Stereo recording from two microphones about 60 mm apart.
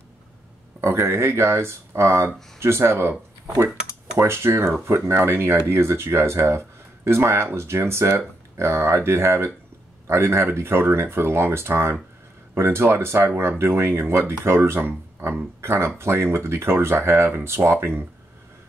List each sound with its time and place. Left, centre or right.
0.7 s speech: right
4.2 s speech: right